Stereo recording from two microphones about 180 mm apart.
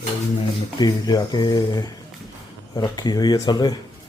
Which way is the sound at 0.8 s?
20° left (ahead or behind).